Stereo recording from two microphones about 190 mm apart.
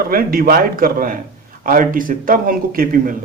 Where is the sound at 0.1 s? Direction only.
50° right (ahead or behind).